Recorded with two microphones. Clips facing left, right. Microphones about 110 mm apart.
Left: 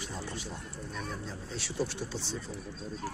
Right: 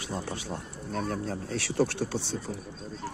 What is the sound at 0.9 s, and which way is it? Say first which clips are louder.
Speech: right 10 dB; 50° right (ahead or behind).